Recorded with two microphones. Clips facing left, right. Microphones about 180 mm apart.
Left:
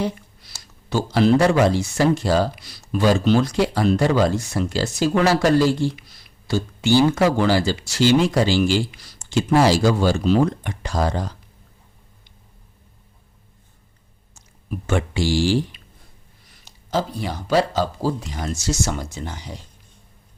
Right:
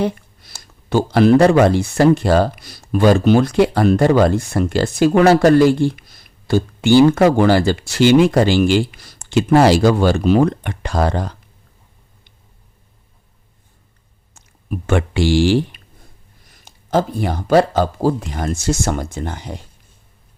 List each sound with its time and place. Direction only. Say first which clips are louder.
0.0 s speech: right 5 dB; 55° right (ahead or behind)
14.3 s speech: right 4 dB; 60° right (ahead or behind)
16.5 s speech: right 6 dB; 50° right (ahead or behind)